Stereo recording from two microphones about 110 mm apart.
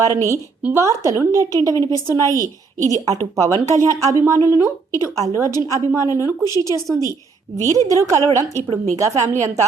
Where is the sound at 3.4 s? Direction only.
30° right (ahead or behind).